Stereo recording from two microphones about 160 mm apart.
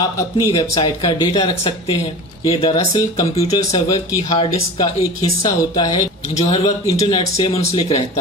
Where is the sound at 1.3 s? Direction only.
35° left (ahead or behind).